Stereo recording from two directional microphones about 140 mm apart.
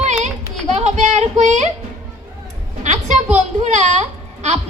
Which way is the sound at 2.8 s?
60° right (ahead or behind).